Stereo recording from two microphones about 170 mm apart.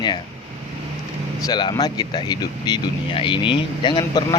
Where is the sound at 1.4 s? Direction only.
25° left (ahead or behind).